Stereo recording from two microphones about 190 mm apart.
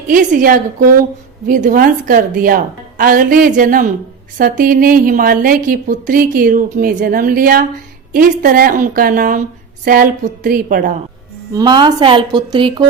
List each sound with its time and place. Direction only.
0.1 s a woman's voice: 45° right (ahead or behind)
11.5 s a woman's voice: 25° right (ahead or behind)